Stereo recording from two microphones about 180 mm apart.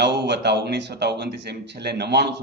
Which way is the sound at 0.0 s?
70° right (ahead or behind).